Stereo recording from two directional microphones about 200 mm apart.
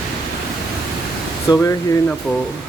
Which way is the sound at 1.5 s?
20° left (ahead or behind).